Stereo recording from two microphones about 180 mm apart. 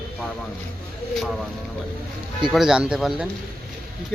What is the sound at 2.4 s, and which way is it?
Speech, 5° right (ahead or behind).